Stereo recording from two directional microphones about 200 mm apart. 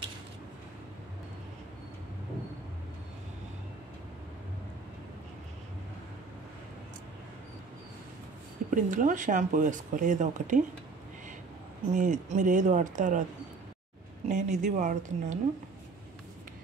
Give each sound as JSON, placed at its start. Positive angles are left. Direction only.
{"t": 8.6, "sound": "speech", "side_deg": -40}
{"t": 11.9, "sound": "speech", "side_deg": -40}
{"t": 14.3, "sound": "speech", "side_deg": -35}